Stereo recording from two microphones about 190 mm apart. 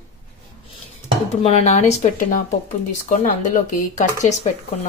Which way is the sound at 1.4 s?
35° left (ahead or behind).